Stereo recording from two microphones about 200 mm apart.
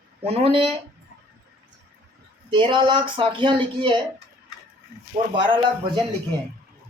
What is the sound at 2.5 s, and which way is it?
Speech, 25° right (ahead or behind).